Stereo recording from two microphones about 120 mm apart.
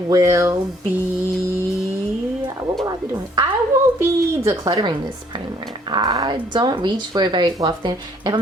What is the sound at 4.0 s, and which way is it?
Speech, 25° right (ahead or behind).